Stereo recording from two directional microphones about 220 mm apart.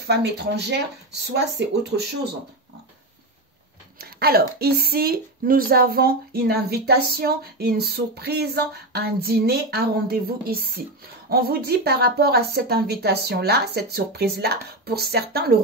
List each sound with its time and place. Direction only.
0.0 s speech: 50° right (ahead or behind)
4.0 s speech: 45° right (ahead or behind)